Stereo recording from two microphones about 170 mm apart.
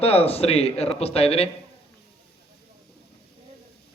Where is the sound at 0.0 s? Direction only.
35° left (ahead or behind).